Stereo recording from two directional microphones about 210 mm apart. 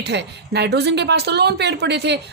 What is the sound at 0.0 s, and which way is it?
Speech, 55° right (ahead or behind).